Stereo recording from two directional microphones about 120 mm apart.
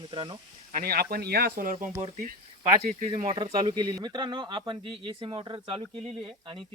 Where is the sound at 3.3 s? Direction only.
40° right (ahead or behind).